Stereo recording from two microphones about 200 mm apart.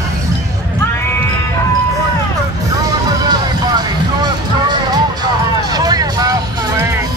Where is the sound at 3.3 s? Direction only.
20° right (ahead or behind).